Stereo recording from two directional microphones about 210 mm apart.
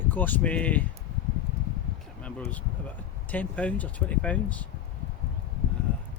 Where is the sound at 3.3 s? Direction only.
5° left (ahead or behind).